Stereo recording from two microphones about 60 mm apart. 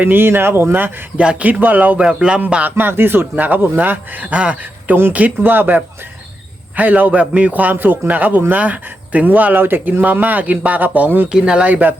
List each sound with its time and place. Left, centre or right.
0.0 s speech: right
1.1 s a man's voice: centre
2.0 s speech: centre
2.6 s speech: right
5.4 s a man's voice: right
11.3 s a man's voice: centre